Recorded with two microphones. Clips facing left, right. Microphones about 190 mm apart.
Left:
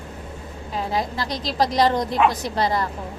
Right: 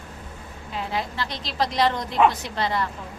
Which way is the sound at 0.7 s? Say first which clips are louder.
Left 4 dB; 40° left (ahead or behind).